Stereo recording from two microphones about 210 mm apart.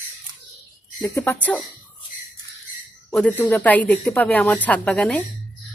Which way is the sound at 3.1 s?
5° left (ahead or behind).